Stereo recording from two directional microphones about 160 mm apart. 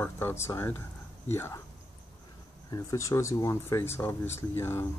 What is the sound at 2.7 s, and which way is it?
Speech, 20° left (ahead or behind).